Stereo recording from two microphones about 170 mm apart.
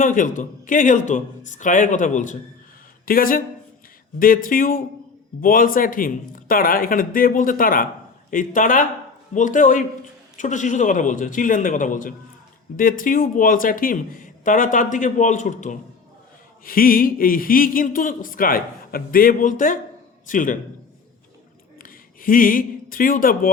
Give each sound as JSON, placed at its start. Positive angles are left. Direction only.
{"t": 0.0, "sound": "speech", "side_deg": 50}
{"t": 16.6, "sound": "speech", "side_deg": 55}
{"t": 21.8, "sound": "speech", "side_deg": 55}